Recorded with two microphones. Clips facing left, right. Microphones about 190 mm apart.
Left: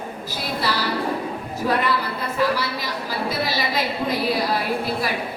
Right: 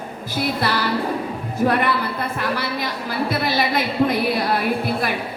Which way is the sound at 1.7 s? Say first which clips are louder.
Left 2 dB; 55° right (ahead or behind).